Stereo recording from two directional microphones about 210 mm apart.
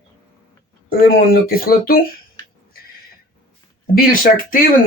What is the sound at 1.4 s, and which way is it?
Speech, 45° left (ahead or behind).